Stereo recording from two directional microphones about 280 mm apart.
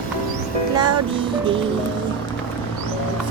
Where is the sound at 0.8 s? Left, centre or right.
Centre.